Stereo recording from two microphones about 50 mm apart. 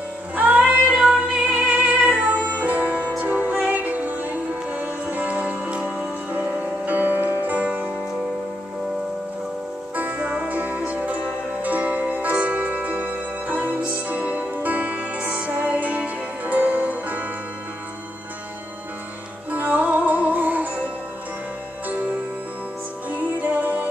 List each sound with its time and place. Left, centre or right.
0.4 s music: right
5.8 s music: centre
6.5 s music: right
9.9 s music: right
19.5 s music: right
23.0 s music: right